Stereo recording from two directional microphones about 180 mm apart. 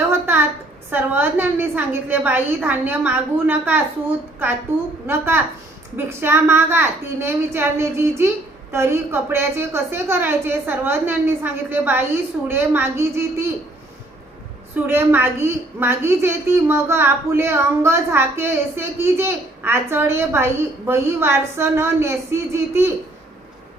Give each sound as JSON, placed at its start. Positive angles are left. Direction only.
{"t": 0.1, "sound": "a sound", "side_deg": -10}
{"t": 0.9, "sound": "a woman's voice", "side_deg": -10}
{"t": 5.0, "sound": "a woman's voice", "side_deg": -15}
{"t": 14.8, "sound": "a woman's voice", "side_deg": -10}